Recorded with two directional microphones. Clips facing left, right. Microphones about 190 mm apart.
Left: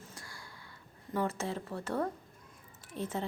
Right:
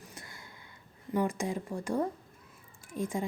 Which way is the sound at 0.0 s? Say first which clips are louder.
Right 1 dB; 20° right (ahead or behind).